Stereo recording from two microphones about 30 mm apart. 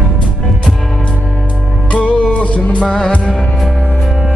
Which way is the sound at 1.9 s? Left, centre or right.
Left.